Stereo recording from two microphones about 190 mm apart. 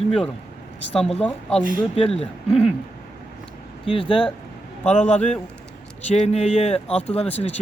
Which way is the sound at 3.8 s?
30° left (ahead or behind).